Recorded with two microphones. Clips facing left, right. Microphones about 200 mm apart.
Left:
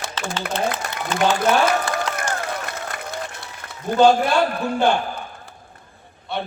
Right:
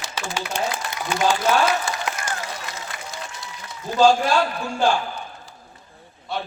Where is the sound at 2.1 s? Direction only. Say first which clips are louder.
Left 5 dB; 55° left (ahead or behind).